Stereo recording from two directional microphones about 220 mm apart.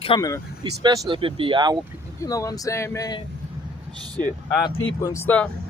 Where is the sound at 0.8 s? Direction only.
20° right (ahead or behind).